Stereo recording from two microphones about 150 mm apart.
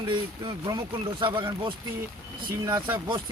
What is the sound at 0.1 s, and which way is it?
Speech, 30° right (ahead or behind).